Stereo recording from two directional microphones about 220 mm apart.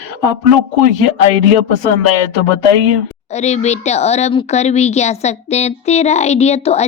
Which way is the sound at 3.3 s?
30° left (ahead or behind).